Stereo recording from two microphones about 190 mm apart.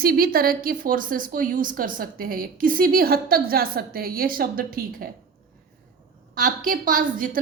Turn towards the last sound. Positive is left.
turn(degrees=-45)  # may be behind; listen again after turning